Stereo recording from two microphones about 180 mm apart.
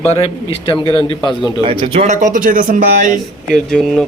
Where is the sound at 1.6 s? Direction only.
35° right (ahead or behind).